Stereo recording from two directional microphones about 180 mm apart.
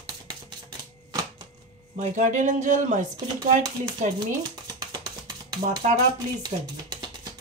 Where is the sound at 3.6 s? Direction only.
25° right (ahead or behind).